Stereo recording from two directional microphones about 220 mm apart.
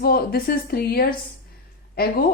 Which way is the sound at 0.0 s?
45° left (ahead or behind).